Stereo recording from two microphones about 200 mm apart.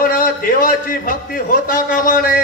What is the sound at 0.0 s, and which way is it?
A man's voice, 45° left (ahead or behind).